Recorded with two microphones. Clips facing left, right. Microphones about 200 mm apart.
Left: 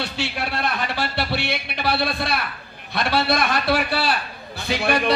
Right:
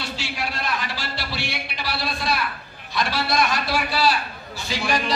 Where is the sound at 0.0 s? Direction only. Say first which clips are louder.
Left 3 dB; 60° left (ahead or behind).